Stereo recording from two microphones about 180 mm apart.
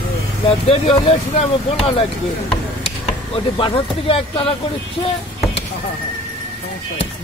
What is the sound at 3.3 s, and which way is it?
Speech, 30° left (ahead or behind).